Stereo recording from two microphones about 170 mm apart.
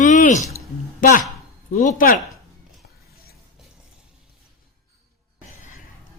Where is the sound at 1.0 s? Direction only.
55° left (ahead or behind).